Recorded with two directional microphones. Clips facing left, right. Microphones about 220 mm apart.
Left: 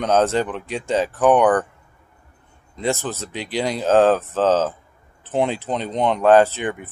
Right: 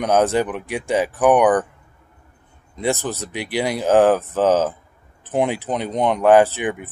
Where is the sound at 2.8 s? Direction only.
15° right (ahead or behind).